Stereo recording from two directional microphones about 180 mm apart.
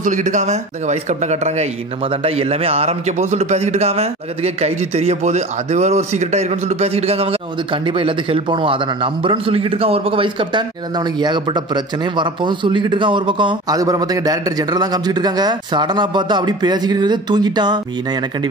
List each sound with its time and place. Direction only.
0.0 s speech: 45° right (ahead or behind); by 17.7 s 25° right (ahead or behind)